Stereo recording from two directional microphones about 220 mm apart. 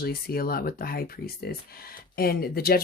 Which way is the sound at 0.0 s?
45° left (ahead or behind).